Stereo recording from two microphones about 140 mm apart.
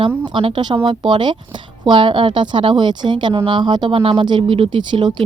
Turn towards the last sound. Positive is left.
turn(degrees=-35)  # may be behind; listen again after turning